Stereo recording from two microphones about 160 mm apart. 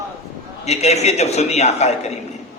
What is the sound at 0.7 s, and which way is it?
A man's voice, 45° left (ahead or behind).